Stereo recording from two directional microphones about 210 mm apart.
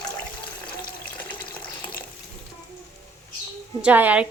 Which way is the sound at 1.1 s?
5° left (ahead or behind).